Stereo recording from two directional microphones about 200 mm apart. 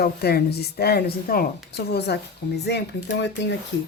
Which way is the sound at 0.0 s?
50° left (ahead or behind).